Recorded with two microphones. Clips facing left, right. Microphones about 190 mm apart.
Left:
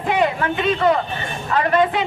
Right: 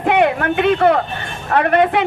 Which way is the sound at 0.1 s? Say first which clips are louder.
Right 4 dB; 60° right (ahead or behind).